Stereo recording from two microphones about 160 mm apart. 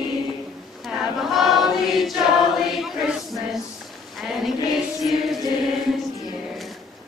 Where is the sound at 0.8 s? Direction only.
Centre (ahead or behind).